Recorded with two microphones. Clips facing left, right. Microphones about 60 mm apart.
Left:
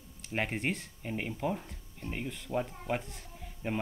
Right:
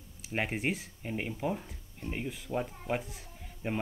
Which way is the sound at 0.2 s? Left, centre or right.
Centre.